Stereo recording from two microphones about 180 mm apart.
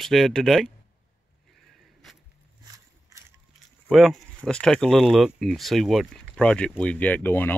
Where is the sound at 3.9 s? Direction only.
Centre (ahead or behind).